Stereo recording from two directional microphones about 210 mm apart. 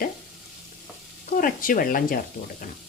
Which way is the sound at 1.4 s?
40° left (ahead or behind).